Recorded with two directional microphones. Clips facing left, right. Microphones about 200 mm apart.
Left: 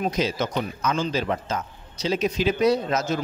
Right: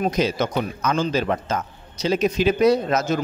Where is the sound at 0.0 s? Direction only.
55° right (ahead or behind).